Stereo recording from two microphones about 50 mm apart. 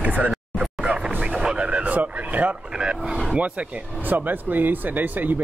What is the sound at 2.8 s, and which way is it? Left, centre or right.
Speech, centre.